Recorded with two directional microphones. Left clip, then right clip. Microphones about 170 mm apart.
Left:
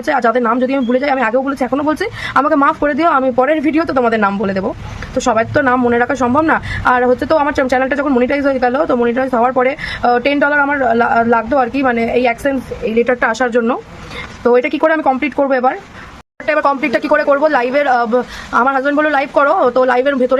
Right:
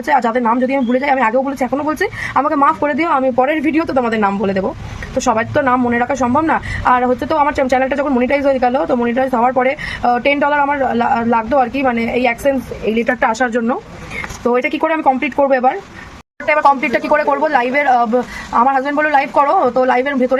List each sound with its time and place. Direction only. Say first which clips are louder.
0.0 s a woman's voice: left 1 dB; 20° left (ahead or behind)